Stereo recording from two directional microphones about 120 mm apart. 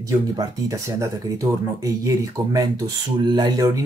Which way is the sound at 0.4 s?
30° right (ahead or behind).